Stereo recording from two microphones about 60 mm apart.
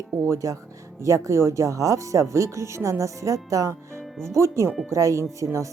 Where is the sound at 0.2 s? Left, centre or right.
Right.